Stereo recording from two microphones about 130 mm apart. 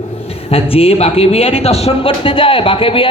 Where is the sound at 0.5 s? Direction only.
50° left (ahead or behind).